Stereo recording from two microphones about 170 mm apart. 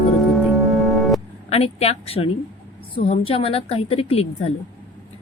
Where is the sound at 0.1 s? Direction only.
Centre (ahead or behind).